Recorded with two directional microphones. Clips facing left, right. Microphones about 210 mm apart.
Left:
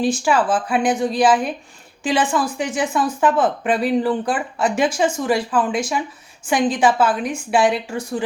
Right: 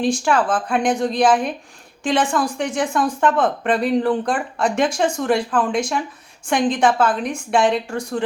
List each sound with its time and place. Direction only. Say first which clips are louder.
0.0 s a woman's voice: even; 5° left (ahead or behind)